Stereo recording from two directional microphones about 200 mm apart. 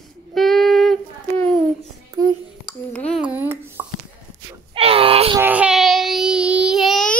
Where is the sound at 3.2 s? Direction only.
10° right (ahead or behind).